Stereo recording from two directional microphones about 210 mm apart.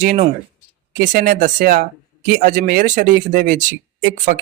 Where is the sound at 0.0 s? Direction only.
40° right (ahead or behind).